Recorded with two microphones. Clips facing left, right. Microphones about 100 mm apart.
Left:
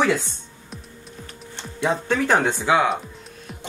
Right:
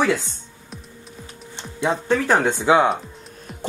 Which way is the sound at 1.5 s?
10° right (ahead or behind).